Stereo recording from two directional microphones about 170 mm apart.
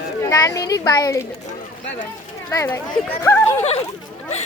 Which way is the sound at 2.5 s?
20° left (ahead or behind).